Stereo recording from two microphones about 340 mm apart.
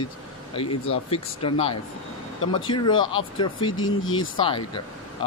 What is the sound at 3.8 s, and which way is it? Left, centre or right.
Speech, left.